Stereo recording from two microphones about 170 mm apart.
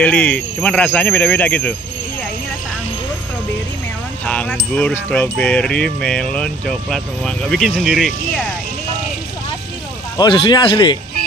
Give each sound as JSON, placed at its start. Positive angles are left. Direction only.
{"t": 0.0, "sound": "speech", "side_deg": 10}
{"t": 4.3, "sound": "speech", "side_deg": 5}
{"t": 10.1, "sound": "speech", "side_deg": 25}